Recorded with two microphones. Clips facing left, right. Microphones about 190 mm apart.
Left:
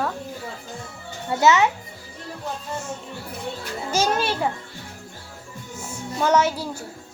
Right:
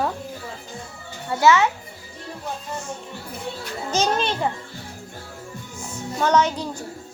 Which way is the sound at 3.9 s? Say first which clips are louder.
Even; 10° left (ahead or behind).